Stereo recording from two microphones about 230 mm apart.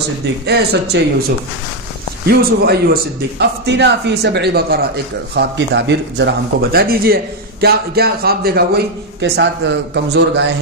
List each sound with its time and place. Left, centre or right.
0.5 s a man's voice: right
2.2 s a man's voice: right